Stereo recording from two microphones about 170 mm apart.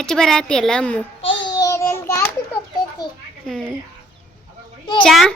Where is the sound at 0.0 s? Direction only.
5° left (ahead or behind).